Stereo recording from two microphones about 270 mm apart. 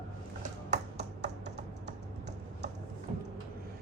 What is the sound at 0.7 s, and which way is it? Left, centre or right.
Finger snapping, right.